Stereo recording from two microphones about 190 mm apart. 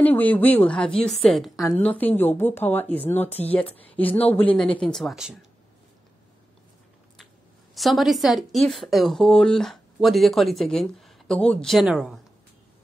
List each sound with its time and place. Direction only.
0.0 s a woman's voice: 10° left (ahead or behind)
3.3 s speech: 35° left (ahead or behind)
3.9 s a woman's voice: 10° left (ahead or behind)
7.7 s a woman's voice: centre (ahead or behind)